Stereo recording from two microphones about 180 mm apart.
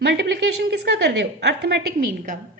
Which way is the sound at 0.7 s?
70° right (ahead or behind).